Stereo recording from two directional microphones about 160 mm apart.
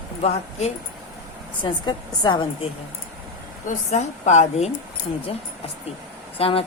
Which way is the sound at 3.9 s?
45° left (ahead or behind).